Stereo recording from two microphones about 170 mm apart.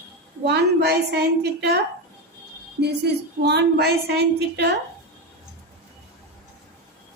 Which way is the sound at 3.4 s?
85° right.